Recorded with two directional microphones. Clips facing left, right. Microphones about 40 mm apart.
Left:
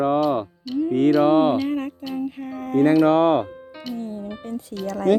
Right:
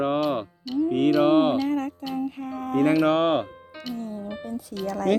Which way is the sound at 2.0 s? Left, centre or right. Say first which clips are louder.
Left 1 dB; centre.